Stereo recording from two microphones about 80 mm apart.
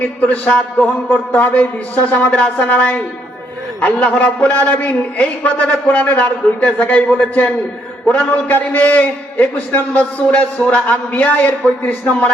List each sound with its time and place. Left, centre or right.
0.0 s a man's voice: centre